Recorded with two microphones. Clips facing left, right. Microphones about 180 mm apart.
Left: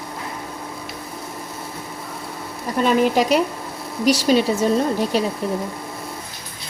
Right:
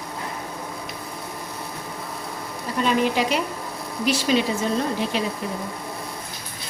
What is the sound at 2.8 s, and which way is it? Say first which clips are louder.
Speech: left 4 dB; 45° left (ahead or behind).